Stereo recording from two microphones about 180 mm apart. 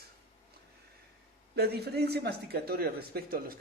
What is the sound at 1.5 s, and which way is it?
Speech, 65° right (ahead or behind).